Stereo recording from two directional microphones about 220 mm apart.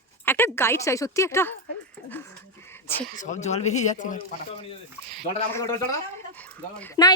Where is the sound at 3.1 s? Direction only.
35° left (ahead or behind).